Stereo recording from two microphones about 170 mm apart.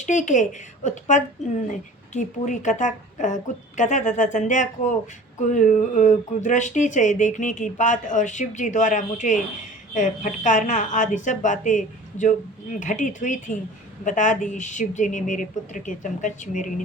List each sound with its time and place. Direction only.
0.0 s speech: 45° left (ahead or behind)